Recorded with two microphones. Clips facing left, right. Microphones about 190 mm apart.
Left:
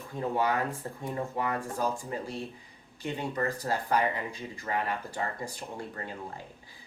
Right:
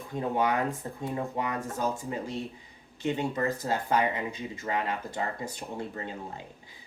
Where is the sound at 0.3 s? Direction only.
20° right (ahead or behind).